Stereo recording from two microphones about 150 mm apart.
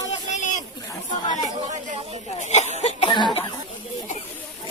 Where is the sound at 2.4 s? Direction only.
50° left (ahead or behind).